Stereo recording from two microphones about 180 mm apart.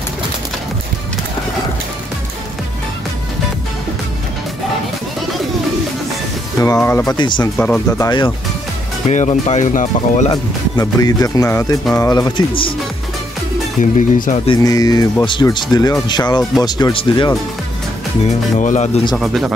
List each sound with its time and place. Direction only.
6.6 s speech: 15° left (ahead or behind)
7.2 s speech: 25° left (ahead or behind)
7.5 s speech: 5° left (ahead or behind)
8.0 s speech: 25° left (ahead or behind)
9.1 s speech: 40° left (ahead or behind)
10.3 s speech: 20° left (ahead or behind)
13.7 s speech: 45° left (ahead or behind)
14.6 s speech: 20° left (ahead or behind)
18.2 s speech: 40° left (ahead or behind)
19.1 s speech: centre (ahead or behind)